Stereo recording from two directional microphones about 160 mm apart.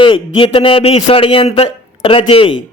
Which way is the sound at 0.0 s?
30° left (ahead or behind).